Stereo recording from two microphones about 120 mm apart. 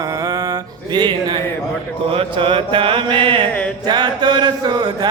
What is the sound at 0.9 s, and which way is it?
Mantra, 40° right (ahead or behind).